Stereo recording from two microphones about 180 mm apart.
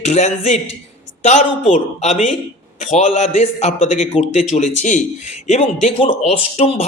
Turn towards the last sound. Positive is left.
turn(degrees=40)  # may be behind; listen again after turning